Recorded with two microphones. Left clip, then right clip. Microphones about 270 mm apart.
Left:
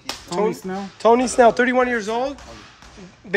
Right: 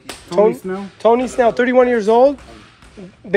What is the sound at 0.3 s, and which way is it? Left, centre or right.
Speech, centre.